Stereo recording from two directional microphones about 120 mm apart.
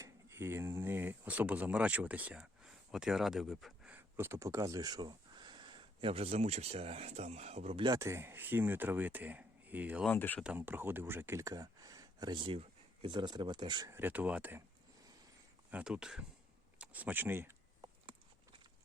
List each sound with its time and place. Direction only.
0.0 s speech: 20° right (ahead or behind); by 3.9 s 5° right (ahead or behind)
3.9 s speech: 20° right (ahead or behind); by 7.9 s 60° right (ahead or behind)
7.9 s speech: 25° right (ahead or behind)
10.1 s speech: 15° left (ahead or behind)
10.6 s speech: 15° right (ahead or behind); by 13.8 s 40° right (ahead or behind)
13.8 s speech: 20° right (ahead or behind)
15.7 s speech: 5° right (ahead or behind)